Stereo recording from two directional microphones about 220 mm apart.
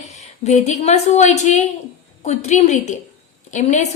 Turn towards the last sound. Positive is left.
turn(degrees=30)  # may be behind; listen again after turning